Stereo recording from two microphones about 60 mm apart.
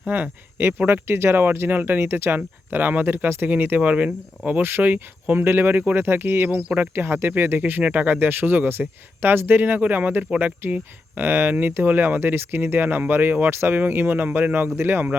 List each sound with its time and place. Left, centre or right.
0.1 s speech: right